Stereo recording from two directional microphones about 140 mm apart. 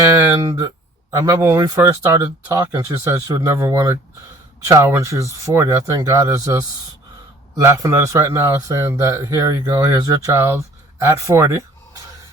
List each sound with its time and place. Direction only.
0.2 s speech: 20° right (ahead or behind)